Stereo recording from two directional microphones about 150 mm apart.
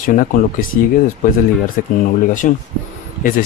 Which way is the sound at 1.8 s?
65° left (ahead or behind).